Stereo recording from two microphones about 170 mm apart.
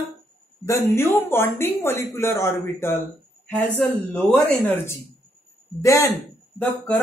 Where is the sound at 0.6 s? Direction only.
15° left (ahead or behind).